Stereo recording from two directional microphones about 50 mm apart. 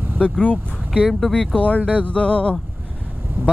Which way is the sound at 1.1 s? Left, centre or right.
Centre.